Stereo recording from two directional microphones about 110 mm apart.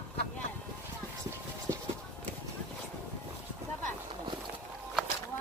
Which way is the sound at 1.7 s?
30° right (ahead or behind).